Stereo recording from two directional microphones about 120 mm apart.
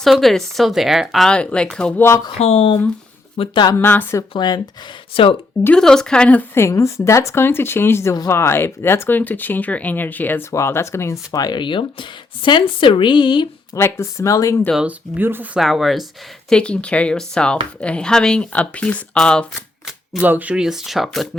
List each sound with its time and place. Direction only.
0.0 s speech: centre (ahead or behind); by 2.2 s 20° left (ahead or behind)
2.4 s speech: 55° left (ahead or behind)
3.3 s speech: 45° left (ahead or behind)
3.8 s speech: 15° left (ahead or behind)
4.4 s speech: 35° left (ahead or behind)
5.1 s speech: 50° left (ahead or behind)
5.6 s a woman's voice: 5° left (ahead or behind); by 13.5 s 40° left (ahead or behind)
13.7 s a woman's voice: 20° left (ahead or behind)
14.8 s speech: 15° right (ahead or behind)
15.5 s speech: centre (ahead or behind)
20.2 s speech: 15° right (ahead or behind)